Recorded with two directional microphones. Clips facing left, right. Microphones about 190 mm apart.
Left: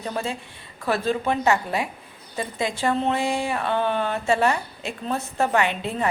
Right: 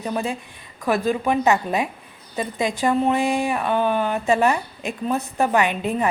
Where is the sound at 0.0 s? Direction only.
15° right (ahead or behind).